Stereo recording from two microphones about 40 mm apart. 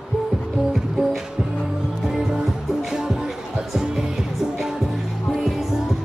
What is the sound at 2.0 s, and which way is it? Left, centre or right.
Music, centre.